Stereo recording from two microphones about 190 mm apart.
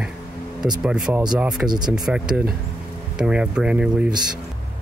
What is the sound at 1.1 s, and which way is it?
Speech, 5° right (ahead or behind).